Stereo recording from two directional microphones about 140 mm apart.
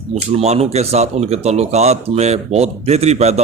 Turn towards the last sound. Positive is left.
turn(degrees=-50)  # may be behind; listen again after turning